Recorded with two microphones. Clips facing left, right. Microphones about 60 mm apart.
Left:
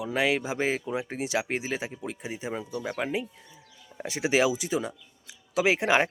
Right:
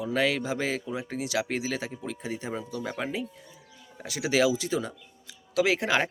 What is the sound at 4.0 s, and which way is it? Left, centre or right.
Speech, left.